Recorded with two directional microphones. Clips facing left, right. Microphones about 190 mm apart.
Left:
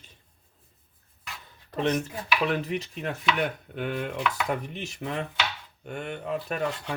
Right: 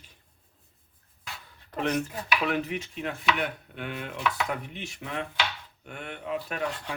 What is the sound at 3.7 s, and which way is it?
Chopping, 45° left (ahead or behind).